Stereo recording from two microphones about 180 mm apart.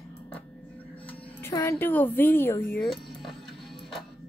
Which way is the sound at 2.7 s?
Centre (ahead or behind).